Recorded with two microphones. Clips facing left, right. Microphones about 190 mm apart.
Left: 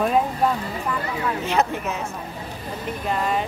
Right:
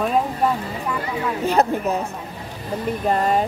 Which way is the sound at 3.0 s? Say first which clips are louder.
Right 4 dB; 45° right (ahead or behind).